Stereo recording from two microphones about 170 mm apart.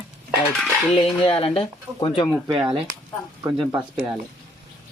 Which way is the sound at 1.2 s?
35° left (ahead or behind).